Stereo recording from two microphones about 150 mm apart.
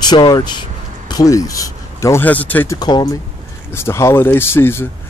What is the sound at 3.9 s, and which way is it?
Speech, 20° left (ahead or behind).